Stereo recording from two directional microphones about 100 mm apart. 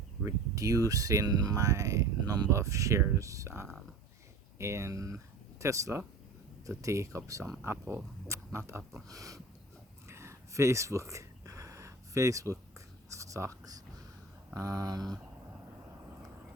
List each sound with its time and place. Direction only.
0.3 s speech: 35° right (ahead or behind)
10.1 s a sound: 30° right (ahead or behind)
14.5 s speech: 35° right (ahead or behind)